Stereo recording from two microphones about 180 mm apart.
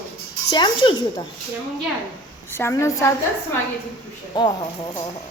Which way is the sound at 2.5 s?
15° left (ahead or behind).